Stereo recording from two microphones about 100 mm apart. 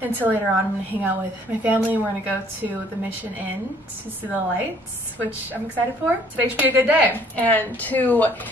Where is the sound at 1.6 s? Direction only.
15° right (ahead or behind).